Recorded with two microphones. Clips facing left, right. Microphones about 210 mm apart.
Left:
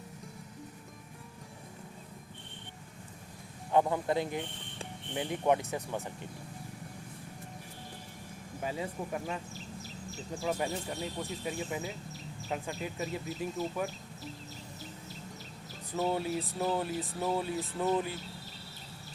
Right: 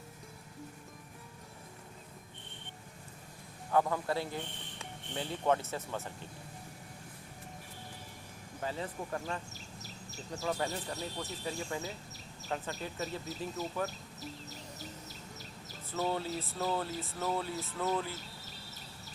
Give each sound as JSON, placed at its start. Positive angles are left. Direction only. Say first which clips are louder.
{"t": 3.7, "sound": "speech", "louder": "left 3 dB", "side_deg": 20}
{"t": 8.6, "sound": "speech", "louder": "left 2 dB", "side_deg": 10}
{"t": 15.9, "sound": "speech", "louder": "left 3 dB", "side_deg": 15}